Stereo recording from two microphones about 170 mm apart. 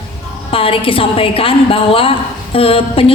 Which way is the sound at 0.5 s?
30° left (ahead or behind).